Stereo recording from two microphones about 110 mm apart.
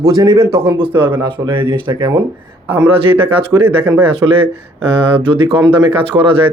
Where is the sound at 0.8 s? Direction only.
50° right (ahead or behind).